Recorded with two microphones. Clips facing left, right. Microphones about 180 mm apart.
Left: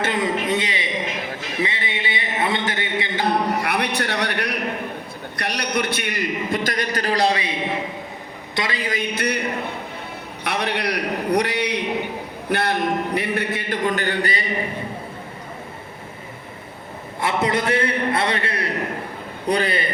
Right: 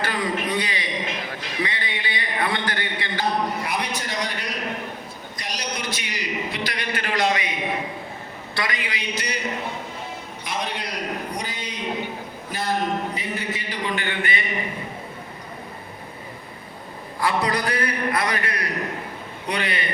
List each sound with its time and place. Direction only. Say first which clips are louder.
0.0 s a sound: left 3 dB; 25° left (ahead or behind)
3.2 s a sound: left 3 dB; 65° left (ahead or behind)
5.4 s a man's voice: left 7 dB; 65° left (ahead or behind); by 7.5 s 30° left (ahead or behind)
8.5 s a man's voice: left 3 dB; 25° left (ahead or behind)
8.8 s a man's voice: left 6 dB; 50° left (ahead or behind)
17.2 s a man's voice: left 2 dB; 25° left (ahead or behind)